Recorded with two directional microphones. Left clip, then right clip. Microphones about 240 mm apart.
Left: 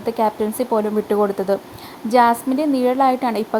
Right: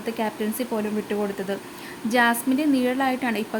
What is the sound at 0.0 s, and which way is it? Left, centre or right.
Speech, centre.